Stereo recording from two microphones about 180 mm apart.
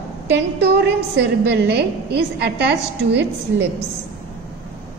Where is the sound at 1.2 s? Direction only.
70° right (ahead or behind).